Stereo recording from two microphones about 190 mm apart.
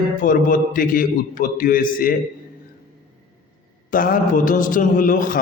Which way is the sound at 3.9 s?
45° left (ahead or behind).